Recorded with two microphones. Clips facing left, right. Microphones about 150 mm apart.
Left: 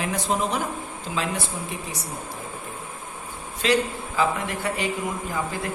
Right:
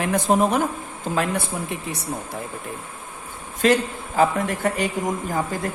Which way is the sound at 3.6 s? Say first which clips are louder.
Right 3 dB; 45° right (ahead or behind).